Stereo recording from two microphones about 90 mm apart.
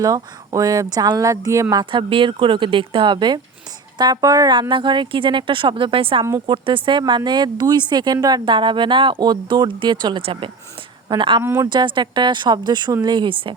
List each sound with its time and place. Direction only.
0.0 s speech: 40° right (ahead or behind)
1.9 s speech: 75° right (ahead or behind); by 4.5 s 40° right (ahead or behind)
4.7 s speech: 65° right (ahead or behind); by 6.2 s 85° right
6.4 s speech: 70° right (ahead or behind); by 8.4 s 45° right (ahead or behind)
8.4 s speech: 65° right (ahead or behind)
10.2 s speech: 90° right
11.1 s speech: 60° right (ahead or behind)